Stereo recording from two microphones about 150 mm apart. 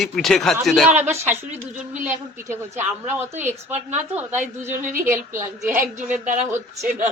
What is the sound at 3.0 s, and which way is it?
A woman's voice, 15° right (ahead or behind).